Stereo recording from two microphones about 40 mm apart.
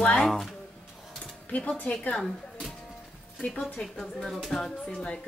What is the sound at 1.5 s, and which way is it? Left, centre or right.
Speech, left.